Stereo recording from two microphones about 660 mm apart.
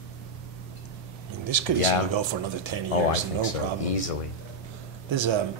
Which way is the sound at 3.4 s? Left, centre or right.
Left.